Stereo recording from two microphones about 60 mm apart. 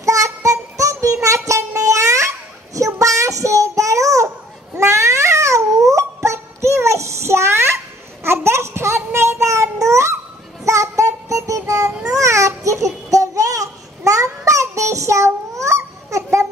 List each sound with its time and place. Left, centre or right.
0.0 s child singing: right
1.2 s a sound: right
4.7 s cat: right
10.6 s child singing: right
12.8 s babbling: right
14.2 s child singing: right